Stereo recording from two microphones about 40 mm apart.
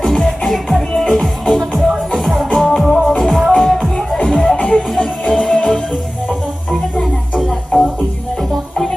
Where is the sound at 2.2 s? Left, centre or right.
Centre.